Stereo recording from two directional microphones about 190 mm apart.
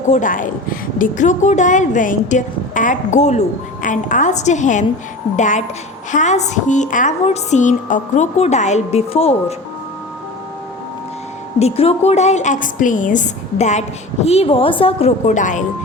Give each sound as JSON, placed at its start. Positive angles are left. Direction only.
{"t": 0.1, "sound": "a woman's voice", "side_deg": 45}
{"t": 11.6, "sound": "a woman's voice", "side_deg": 35}